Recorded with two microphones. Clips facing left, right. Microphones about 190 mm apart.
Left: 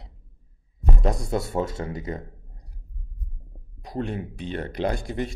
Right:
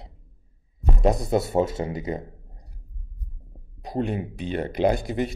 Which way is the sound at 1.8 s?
15° right (ahead or behind).